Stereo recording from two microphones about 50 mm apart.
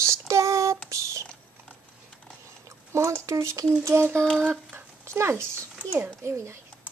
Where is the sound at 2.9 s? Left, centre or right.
Right.